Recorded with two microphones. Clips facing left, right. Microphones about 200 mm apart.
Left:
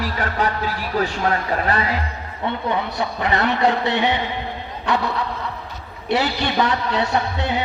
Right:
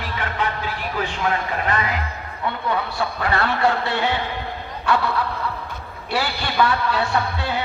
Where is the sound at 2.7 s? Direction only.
20° left (ahead or behind).